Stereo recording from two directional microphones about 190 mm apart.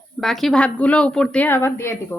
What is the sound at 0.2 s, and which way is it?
Speech, centre (ahead or behind).